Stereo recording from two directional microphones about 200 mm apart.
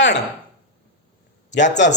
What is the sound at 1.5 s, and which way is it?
Speech, 35° left (ahead or behind).